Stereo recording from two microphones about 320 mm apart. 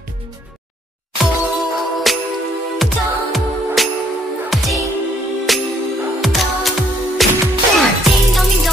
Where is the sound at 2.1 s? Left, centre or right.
Centre.